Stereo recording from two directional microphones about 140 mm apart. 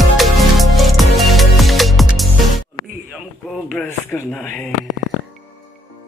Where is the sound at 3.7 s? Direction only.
10° left (ahead or behind).